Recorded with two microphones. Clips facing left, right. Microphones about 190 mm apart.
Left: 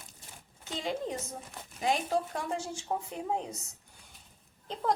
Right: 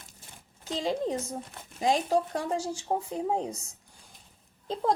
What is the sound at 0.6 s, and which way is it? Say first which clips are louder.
A woman's voice: right 5 dB; 35° right (ahead or behind).